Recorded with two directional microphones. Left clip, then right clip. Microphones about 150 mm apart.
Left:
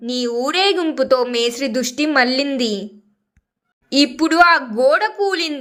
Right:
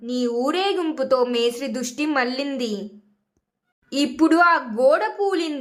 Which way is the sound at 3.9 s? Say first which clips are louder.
Left 3 dB; 25° left (ahead or behind).